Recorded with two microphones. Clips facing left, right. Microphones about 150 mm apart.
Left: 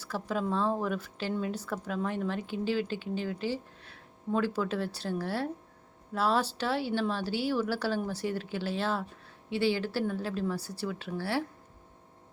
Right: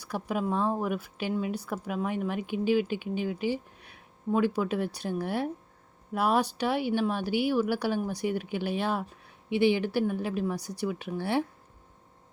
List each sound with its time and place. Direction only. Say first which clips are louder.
0.0 s speech: right 2 dB; 15° right (ahead or behind)